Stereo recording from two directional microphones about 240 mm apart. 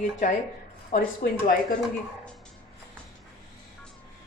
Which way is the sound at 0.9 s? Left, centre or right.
Left.